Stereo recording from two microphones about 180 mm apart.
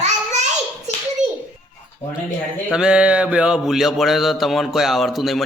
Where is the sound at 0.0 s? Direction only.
40° right (ahead or behind).